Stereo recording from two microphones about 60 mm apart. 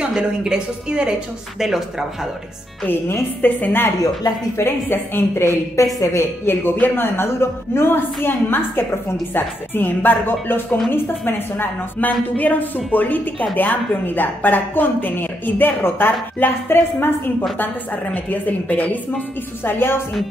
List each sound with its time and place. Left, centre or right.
0.0 s a woman's voice: centre
2.8 s speech: left
5.8 s a woman's voice: left
6.4 s speech: left
18.1 s a woman's voice: left